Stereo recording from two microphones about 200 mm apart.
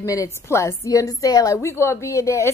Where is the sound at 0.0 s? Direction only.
15° left (ahead or behind).